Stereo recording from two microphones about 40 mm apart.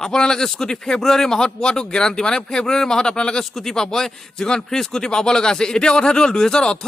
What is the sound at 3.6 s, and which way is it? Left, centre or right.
Speech, centre.